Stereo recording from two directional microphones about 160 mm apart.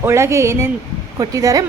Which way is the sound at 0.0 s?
15° right (ahead or behind).